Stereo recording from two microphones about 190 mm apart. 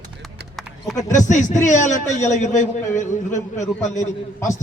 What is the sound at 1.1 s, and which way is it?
A man's voice, 40° left (ahead or behind).